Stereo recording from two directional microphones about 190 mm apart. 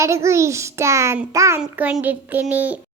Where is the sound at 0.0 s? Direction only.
15° right (ahead or behind).